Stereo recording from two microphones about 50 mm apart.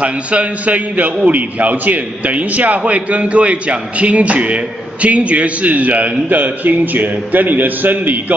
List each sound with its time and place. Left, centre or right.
0.0 s a man's voice: right